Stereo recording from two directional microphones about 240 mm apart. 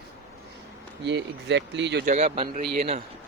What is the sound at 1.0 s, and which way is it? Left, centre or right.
Speech, right.